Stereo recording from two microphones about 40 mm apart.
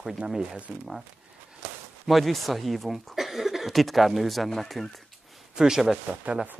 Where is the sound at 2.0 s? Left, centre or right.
Centre.